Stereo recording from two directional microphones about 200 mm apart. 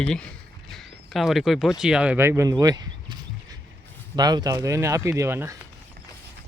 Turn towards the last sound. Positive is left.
turn(degrees=-15)  # may be behind; listen again after turning